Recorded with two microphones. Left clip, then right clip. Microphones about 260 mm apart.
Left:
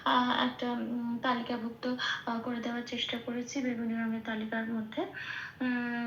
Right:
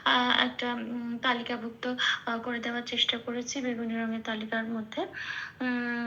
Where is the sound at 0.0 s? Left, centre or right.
Centre.